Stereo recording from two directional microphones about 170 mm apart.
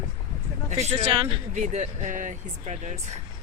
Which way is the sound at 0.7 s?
40° right (ahead or behind).